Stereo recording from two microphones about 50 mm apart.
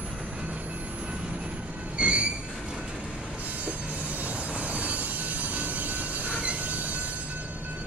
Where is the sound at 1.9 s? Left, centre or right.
Right.